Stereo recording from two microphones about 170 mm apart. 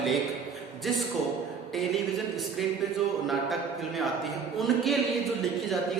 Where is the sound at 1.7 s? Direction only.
Centre (ahead or behind).